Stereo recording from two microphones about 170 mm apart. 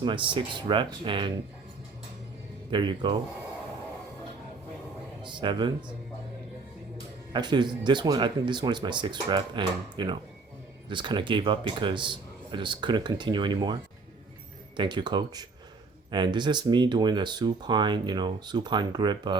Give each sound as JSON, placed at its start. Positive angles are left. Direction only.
{"t": 0.0, "sound": "speech", "side_deg": -30}
{"t": 2.6, "sound": "speech", "side_deg": -25}
{"t": 5.2, "sound": "speech", "side_deg": -25}
{"t": 7.3, "sound": "speech", "side_deg": -25}
{"t": 14.8, "sound": "speech", "side_deg": -25}